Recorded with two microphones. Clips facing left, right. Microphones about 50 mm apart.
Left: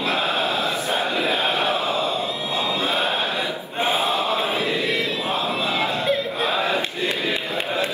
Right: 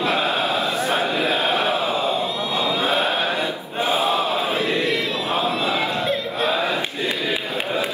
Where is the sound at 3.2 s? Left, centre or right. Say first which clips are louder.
Right 2 dB; right.